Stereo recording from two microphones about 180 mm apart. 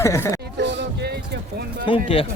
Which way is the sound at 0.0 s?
15° left (ahead or behind).